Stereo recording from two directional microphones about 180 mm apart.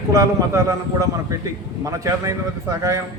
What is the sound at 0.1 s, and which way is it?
A man's voice, 15° right (ahead or behind).